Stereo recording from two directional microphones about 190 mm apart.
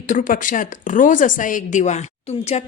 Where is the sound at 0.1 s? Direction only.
45° left (ahead or behind).